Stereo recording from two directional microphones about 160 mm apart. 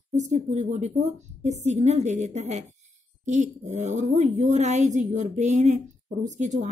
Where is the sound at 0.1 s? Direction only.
45° right (ahead or behind).